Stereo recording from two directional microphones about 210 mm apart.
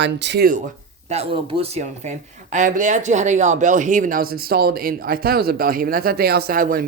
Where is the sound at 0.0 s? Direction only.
55° right (ahead or behind).